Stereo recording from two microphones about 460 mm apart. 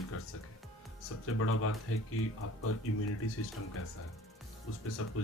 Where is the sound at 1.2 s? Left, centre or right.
Left.